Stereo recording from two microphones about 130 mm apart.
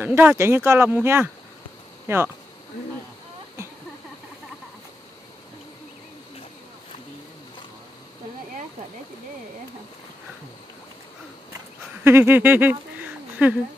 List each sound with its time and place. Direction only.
0.0 s speech: 15° right (ahead or behind)
12.0 s speech: 15° right (ahead or behind)